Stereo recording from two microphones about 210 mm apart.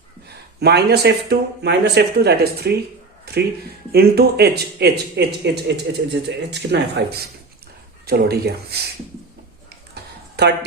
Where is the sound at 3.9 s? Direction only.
50° right (ahead or behind).